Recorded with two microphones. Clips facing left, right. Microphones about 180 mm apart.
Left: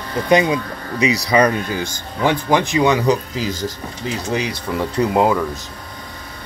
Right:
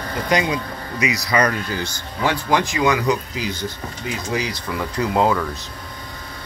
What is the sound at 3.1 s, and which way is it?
Speech, 35° left (ahead or behind).